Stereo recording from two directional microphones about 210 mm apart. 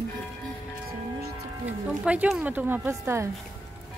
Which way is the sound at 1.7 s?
5° right (ahead or behind).